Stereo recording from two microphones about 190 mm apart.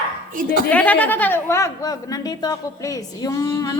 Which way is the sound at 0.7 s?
10° left (ahead or behind).